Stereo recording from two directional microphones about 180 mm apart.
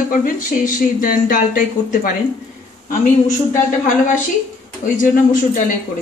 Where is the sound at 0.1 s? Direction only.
45° left (ahead or behind).